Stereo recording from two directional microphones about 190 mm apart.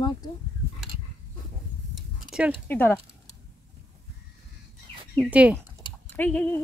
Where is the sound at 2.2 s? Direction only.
5° right (ahead or behind).